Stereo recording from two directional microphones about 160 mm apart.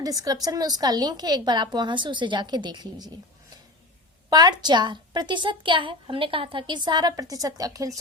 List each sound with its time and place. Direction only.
0.0 s a woman's voice: 25° right (ahead or behind)
4.3 s a woman's voice: 25° right (ahead or behind)